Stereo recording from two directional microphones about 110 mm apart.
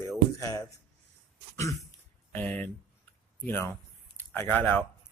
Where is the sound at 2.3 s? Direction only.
15° left (ahead or behind).